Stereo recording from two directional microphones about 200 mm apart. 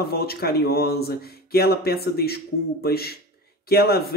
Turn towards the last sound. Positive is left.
turn(degrees=50)  # may be behind; listen again after turning